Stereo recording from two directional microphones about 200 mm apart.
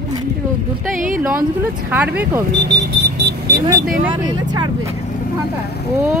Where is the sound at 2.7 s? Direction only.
55° right (ahead or behind).